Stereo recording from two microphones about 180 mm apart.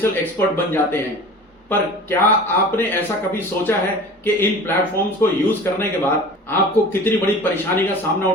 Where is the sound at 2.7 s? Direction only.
10° left (ahead or behind).